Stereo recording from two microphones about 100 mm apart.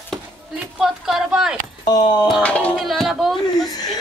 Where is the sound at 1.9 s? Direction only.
45° left (ahead or behind).